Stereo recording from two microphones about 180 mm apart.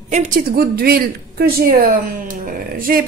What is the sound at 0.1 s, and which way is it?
A woman's voice, 50° right (ahead or behind).